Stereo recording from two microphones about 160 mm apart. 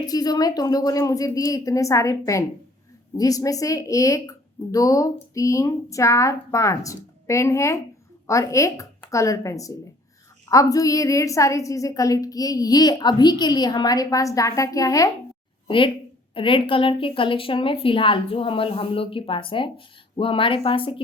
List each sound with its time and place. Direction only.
0.0 s speech: 25° left (ahead or behind)
15.6 s a woman's voice: 30° left (ahead or behind)